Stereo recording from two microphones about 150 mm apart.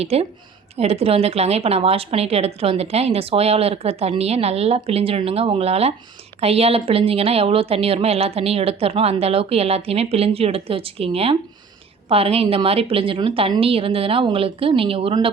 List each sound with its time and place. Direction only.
0.0 s a woman's voice: 40° right (ahead or behind)